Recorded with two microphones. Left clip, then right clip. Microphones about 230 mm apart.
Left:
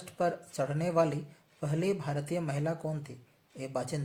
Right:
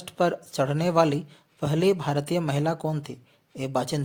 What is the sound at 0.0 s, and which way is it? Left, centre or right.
Speech, right.